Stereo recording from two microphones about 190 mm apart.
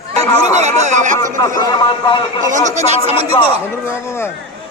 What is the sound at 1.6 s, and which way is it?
Speech, 25° left (ahead or behind).